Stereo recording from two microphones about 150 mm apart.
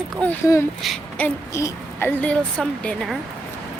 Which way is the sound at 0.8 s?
Centre (ahead or behind).